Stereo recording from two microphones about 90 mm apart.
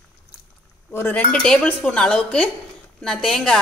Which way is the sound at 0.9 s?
25° left (ahead or behind).